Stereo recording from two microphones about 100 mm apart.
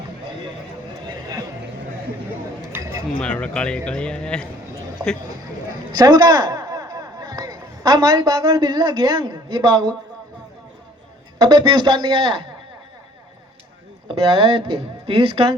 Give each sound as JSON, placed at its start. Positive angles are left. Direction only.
{"t": 3.2, "sound": "speech", "side_deg": 10}
{"t": 5.9, "sound": "speech", "side_deg": -40}
{"t": 11.3, "sound": "a man's voice", "side_deg": -45}
{"t": 14.1, "sound": "speech", "side_deg": -55}